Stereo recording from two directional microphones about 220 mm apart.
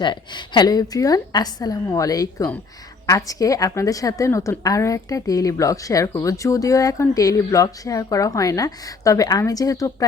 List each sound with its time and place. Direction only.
0.0 s a woman's voice: 20° left (ahead or behind)